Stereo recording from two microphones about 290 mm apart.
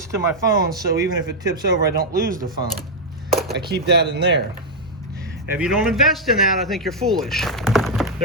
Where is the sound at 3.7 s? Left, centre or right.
Right.